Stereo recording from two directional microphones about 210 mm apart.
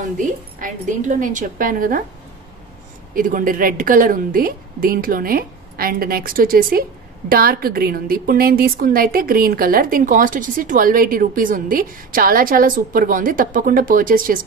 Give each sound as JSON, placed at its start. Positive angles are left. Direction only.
{"t": 0.0, "sound": "a woman's voice", "side_deg": -40}
{"t": 3.2, "sound": "a woman's voice", "side_deg": -40}